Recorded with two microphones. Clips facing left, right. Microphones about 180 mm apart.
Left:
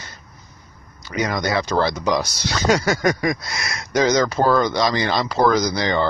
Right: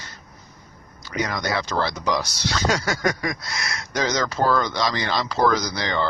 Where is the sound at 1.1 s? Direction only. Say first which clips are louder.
Left 3 dB; 20° left (ahead or behind).